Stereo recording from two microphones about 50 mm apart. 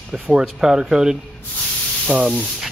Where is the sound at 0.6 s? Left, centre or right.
Centre.